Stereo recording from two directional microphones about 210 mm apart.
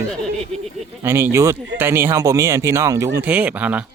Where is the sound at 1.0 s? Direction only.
10° right (ahead or behind).